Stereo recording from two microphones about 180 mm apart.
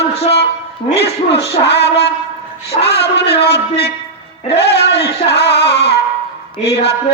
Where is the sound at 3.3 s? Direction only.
65° left (ahead or behind).